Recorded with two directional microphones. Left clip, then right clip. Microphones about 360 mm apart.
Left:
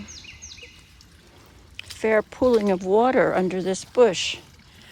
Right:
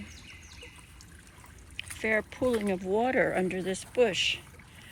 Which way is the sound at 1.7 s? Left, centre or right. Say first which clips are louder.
Left 8 dB; centre.